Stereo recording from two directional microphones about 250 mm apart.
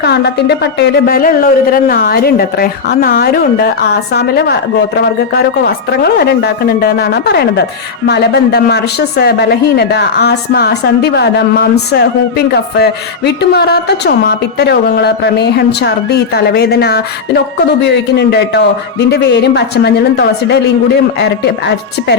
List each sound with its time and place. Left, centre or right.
0.0 s a woman's voice: left